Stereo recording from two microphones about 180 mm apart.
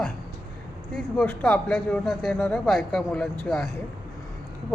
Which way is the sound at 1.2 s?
5° left (ahead or behind).